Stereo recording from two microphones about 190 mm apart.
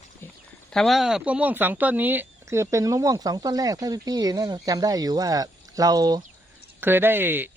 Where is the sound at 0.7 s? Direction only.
Centre (ahead or behind).